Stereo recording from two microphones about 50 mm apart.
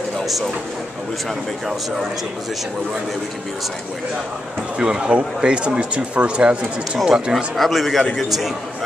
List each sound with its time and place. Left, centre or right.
0.2 s a sound: centre
4.7 s speech: centre
7.5 s a man's voice: centre